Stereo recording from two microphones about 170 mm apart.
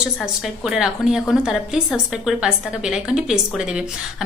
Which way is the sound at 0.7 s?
5° right (ahead or behind).